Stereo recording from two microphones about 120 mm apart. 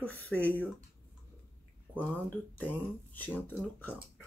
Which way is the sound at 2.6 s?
15° left (ahead or behind).